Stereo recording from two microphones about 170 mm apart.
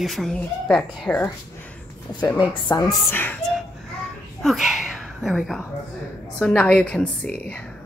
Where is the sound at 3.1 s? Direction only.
10° left (ahead or behind).